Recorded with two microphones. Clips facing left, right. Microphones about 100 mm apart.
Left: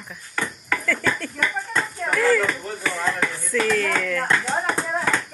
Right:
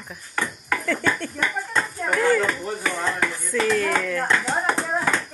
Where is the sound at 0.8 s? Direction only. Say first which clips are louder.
Right 1 dB; 25° right (ahead or behind).